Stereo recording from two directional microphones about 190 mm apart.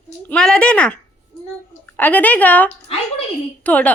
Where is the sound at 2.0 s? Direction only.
10° left (ahead or behind).